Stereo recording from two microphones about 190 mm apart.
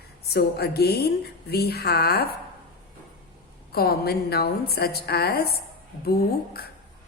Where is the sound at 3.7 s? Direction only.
55° left (ahead or behind).